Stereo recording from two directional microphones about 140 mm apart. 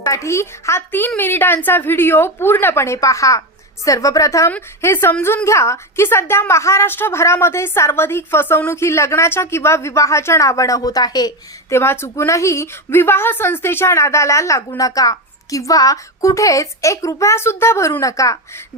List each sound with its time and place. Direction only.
0.0 s a woman's voice: 20° left (ahead or behind)
11.7 s a woman's voice: 20° left (ahead or behind)